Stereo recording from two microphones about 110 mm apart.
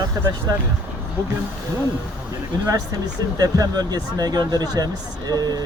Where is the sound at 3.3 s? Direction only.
35° right (ahead or behind).